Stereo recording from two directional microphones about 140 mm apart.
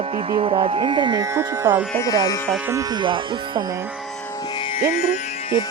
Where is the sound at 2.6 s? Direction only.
20° right (ahead or behind).